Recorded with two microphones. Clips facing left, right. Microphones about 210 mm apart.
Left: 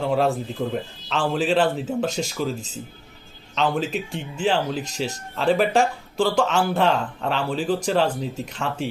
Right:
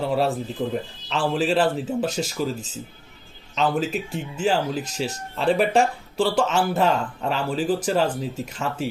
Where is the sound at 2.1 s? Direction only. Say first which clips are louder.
Even; 40° right (ahead or behind).